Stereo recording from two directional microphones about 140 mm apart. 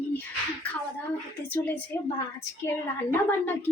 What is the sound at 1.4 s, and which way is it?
A woman's voice, 10° left (ahead or behind).